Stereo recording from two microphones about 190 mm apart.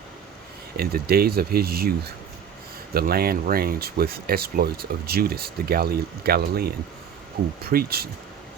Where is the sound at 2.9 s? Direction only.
55° right (ahead or behind).